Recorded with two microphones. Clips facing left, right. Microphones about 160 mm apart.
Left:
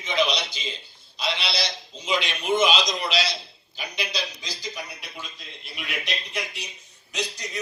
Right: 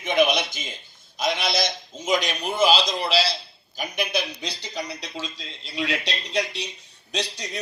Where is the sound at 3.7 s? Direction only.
55° right (ahead or behind); by 6.6 s 75° right (ahead or behind).